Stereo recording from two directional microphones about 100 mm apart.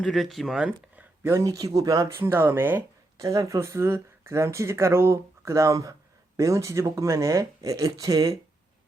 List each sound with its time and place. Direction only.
0.0 s speech: centre (ahead or behind)
1.2 s speech: 30° right (ahead or behind)
2.1 s speech: 25° right (ahead or behind)
3.2 s speech: 35° right (ahead or behind)